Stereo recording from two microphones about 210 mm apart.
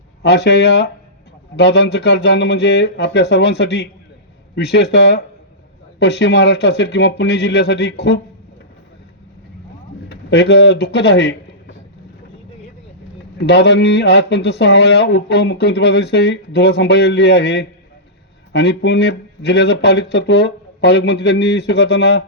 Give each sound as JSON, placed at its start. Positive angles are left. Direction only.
{"t": 0.2, "sound": "speech", "side_deg": 55}
{"t": 10.1, "sound": "speech", "side_deg": 55}
{"t": 13.4, "sound": "speech", "side_deg": 55}